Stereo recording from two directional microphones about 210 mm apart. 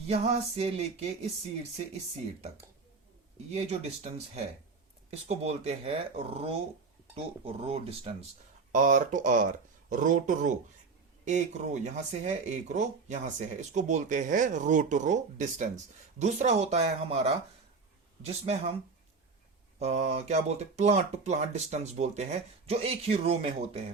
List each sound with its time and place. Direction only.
0.1 s speech: 30° right (ahead or behind)
3.5 s speech: 30° right (ahead or behind)
19.8 s speech: 30° right (ahead or behind)